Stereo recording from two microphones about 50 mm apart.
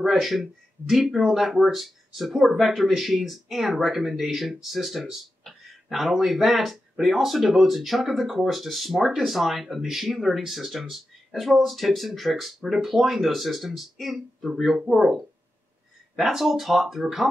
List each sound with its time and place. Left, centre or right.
0.0 s speech: centre